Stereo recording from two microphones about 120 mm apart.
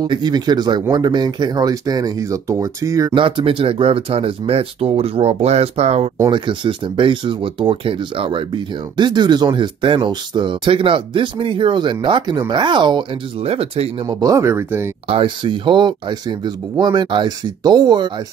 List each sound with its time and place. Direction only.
0.0 s speech: 35° right (ahead or behind)
3.2 s speech: 45° right (ahead or behind); by 6.0 s 60° right (ahead or behind)
6.3 s speech: 45° right (ahead or behind)
13.4 s speech: 55° right (ahead or behind)
14.0 s speech: 25° right (ahead or behind)
15.0 s speech: 45° right (ahead or behind)